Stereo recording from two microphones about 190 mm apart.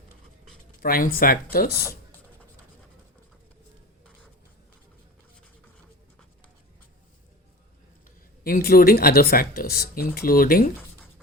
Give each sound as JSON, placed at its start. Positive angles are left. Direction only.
{"t": 0.8, "sound": "speech", "side_deg": 50}
{"t": 8.4, "sound": "speech", "side_deg": 50}